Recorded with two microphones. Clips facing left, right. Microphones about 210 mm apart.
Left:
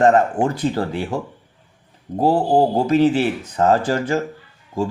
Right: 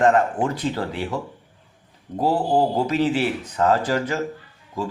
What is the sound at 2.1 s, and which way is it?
Speech, 25° left (ahead or behind).